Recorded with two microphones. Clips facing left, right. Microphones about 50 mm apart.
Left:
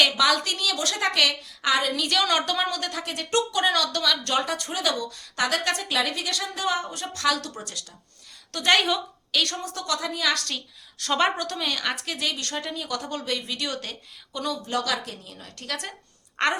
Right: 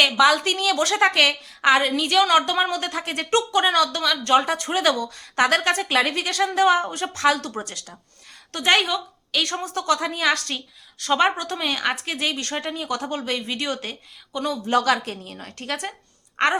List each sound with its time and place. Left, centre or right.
0.2 s a woman's voice: right
0.4 s speech: right
2.0 s a woman's voice: centre; by 6.7 s right
7.1 s speech: right
8.7 s speech: centre
9.4 s a woman's voice: centre
9.7 s speech: right
10.9 s a woman's voice: centre
11.3 s a woman's voice: right
14.7 s a woman's voice: right
16.4 s a woman's voice: centre